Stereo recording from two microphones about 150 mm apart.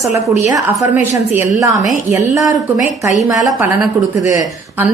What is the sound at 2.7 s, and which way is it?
Speech, 55° left (ahead or behind).